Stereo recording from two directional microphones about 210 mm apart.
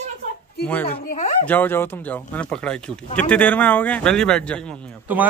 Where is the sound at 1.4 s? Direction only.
10° left (ahead or behind).